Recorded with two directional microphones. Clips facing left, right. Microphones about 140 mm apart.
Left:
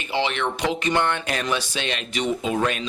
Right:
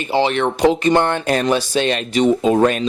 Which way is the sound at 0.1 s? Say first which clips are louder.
Right 7 dB; 40° right (ahead or behind).